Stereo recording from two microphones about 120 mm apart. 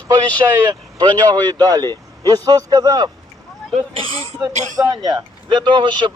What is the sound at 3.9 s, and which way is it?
Speech, 50° right (ahead or behind).